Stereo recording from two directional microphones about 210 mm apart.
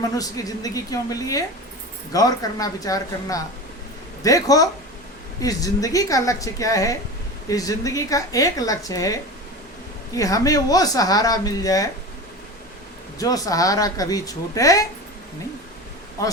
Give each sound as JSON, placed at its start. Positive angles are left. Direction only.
{"t": 0.2, "sound": "a woman's voice", "side_deg": 15}
{"t": 10.2, "sound": "a woman's voice", "side_deg": 15}
{"t": 13.1, "sound": "a woman's voice", "side_deg": 15}
{"t": 16.2, "sound": "a woman's voice", "side_deg": 15}